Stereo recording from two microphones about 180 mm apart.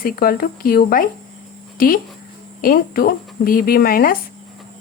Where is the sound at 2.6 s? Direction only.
55° left (ahead or behind).